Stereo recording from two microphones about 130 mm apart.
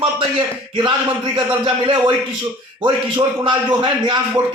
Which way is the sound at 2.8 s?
40° right (ahead or behind).